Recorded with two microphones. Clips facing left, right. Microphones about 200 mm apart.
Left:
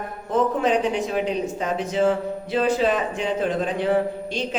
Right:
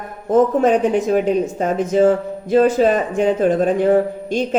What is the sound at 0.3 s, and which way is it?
Speech, 45° right (ahead or behind).